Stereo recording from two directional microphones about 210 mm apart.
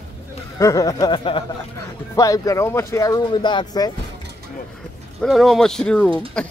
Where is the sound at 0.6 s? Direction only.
15° left (ahead or behind).